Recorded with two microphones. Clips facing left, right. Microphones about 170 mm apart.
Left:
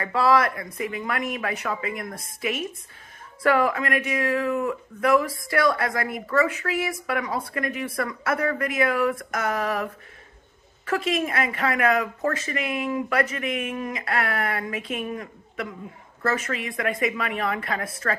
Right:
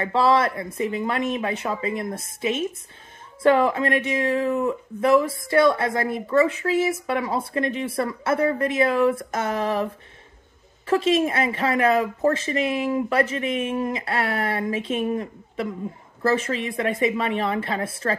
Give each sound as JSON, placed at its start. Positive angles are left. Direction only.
{"t": 0.0, "sound": "speech", "side_deg": -25}
{"t": 10.9, "sound": "speech", "side_deg": -25}